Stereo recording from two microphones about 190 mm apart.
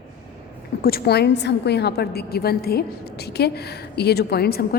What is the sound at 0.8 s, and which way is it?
A woman's voice, 50° left (ahead or behind).